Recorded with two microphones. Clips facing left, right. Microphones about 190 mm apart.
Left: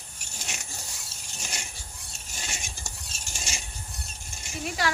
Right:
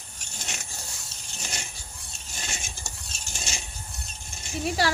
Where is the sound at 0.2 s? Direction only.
10° left (ahead or behind).